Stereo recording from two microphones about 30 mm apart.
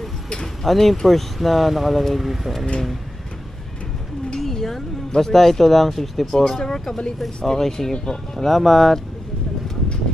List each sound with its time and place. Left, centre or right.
0.7 s speech: centre
4.4 s speech: centre
8.5 s speech: centre